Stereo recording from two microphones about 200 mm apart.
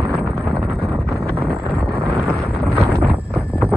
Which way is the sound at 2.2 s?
Centre (ahead or behind).